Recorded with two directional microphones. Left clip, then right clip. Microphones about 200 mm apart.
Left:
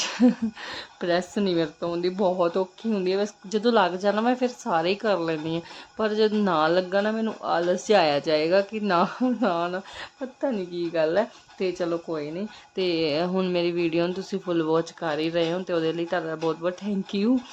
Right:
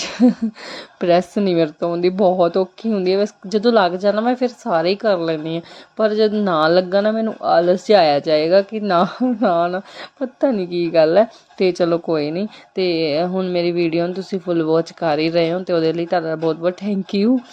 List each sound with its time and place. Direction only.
0.0 s speech: 15° right (ahead or behind)
12.7 s speech: 10° right (ahead or behind)